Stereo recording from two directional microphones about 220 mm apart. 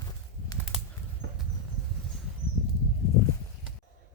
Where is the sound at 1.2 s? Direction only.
50° right (ahead or behind).